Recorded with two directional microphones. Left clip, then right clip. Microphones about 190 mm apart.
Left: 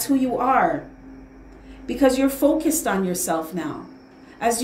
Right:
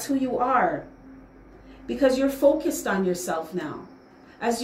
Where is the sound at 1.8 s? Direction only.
40° left (ahead or behind).